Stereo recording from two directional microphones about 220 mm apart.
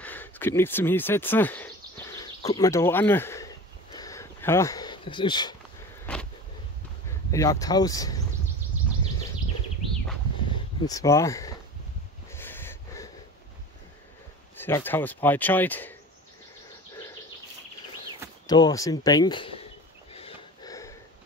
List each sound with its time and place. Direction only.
0.0 s a sound: 10° left (ahead or behind)
6.1 s vehicle: 5° left (ahead or behind)
7.2 s speech: 15° left (ahead or behind)
10.5 s speech: 15° left (ahead or behind)
12.3 s snort: 10° left (ahead or behind)
14.6 s speech: 10° left (ahead or behind)
18.5 s speech: 15° left (ahead or behind)
20.1 s a sound: 25° left (ahead or behind)